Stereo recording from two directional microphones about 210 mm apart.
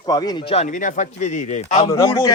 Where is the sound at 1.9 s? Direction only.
15° left (ahead or behind).